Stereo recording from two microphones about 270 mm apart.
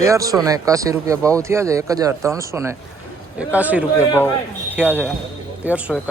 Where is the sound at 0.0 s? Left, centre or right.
Centre.